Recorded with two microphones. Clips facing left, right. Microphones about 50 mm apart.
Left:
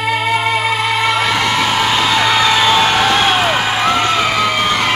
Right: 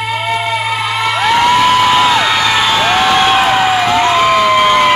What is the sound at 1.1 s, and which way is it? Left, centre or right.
Music, centre.